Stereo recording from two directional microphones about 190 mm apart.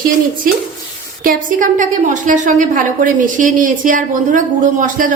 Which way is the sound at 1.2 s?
45° right (ahead or behind).